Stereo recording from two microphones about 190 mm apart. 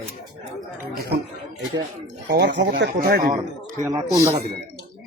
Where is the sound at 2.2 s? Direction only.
65° right (ahead or behind).